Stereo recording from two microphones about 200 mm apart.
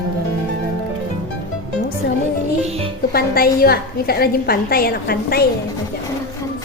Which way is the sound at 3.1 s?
50° left (ahead or behind).